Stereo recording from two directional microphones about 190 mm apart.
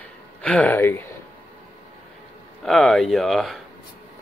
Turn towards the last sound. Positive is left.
turn(degrees=0)  # may be behind; listen again after turning